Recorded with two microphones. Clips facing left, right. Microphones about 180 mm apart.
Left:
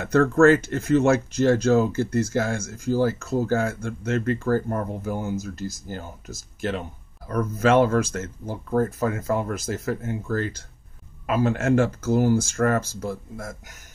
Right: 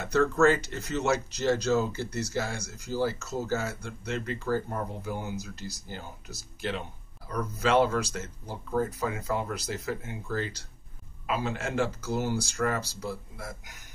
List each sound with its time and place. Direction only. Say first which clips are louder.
0.0 s speech: left 6 dB; 55° left (ahead or behind)